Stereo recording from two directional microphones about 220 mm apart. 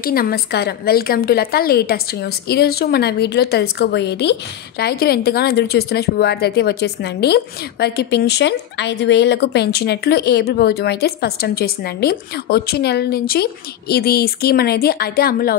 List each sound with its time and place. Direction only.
0.0 s speech: 40° left (ahead or behind)